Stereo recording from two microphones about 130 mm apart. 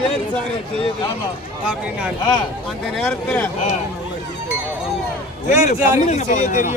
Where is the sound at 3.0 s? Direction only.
5° left (ahead or behind).